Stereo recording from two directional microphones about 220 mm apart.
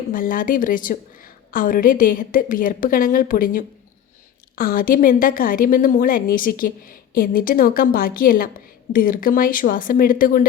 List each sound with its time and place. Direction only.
0.1 s a woman's voice: 40° left (ahead or behind)